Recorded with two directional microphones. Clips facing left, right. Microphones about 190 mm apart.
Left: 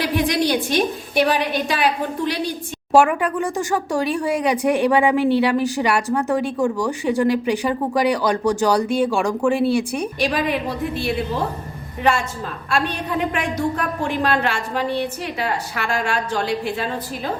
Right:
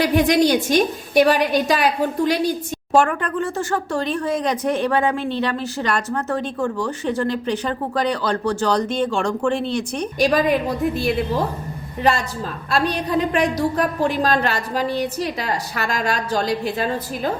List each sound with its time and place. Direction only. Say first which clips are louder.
0.0 s a woman's voice: right 4 dB; 45° right (ahead or behind)
2.9 s speech: left 2 dB; 10° left (ahead or behind)
10.2 s a woman's voice: right 6 dB; 40° right (ahead or behind)
12.7 s a woman's voice: right 3 dB; 40° right (ahead or behind)